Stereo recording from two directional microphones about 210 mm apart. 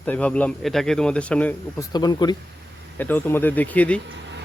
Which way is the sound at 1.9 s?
20° left (ahead or behind).